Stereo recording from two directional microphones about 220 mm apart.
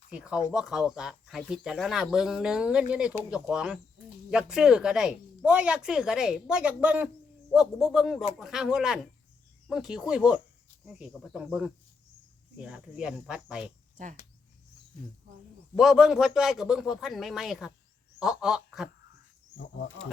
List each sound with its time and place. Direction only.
0.1 s speech: 5° right (ahead or behind)
13.9 s speech: 35° right (ahead or behind)
15.7 s speech: centre (ahead or behind)